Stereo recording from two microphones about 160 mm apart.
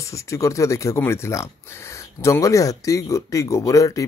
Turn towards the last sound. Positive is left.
turn(degrees=20)  # may be behind; listen again after turning